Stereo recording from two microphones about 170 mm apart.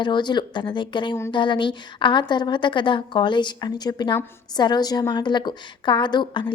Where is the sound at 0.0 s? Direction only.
25° left (ahead or behind).